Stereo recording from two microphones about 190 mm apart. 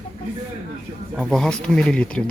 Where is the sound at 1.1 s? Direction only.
Centre (ahead or behind).